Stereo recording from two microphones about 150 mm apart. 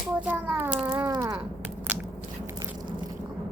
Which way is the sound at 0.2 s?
10° right (ahead or behind).